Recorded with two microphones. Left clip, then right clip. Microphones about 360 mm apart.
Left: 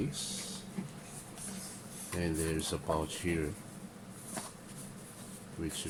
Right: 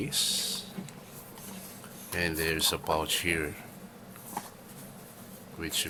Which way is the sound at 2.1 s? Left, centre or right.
Right.